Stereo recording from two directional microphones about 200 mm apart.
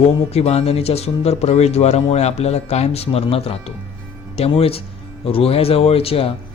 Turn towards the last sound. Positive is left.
turn(degrees=30)  # may be behind; listen again after turning